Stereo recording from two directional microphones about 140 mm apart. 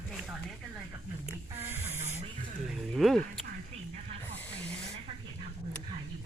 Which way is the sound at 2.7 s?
Centre (ahead or behind).